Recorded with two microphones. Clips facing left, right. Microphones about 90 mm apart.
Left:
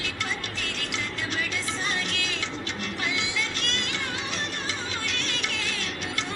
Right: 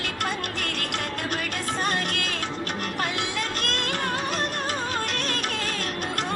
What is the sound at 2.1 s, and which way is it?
Music, 50° right (ahead or behind).